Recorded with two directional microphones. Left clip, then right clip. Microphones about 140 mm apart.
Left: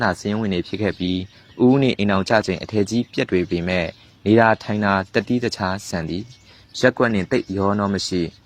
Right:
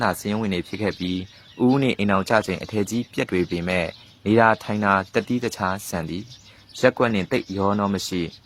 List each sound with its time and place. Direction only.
0.3 s speech: 15° left (ahead or behind)